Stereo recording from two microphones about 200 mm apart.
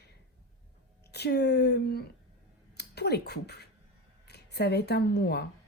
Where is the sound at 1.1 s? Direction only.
55° left (ahead or behind).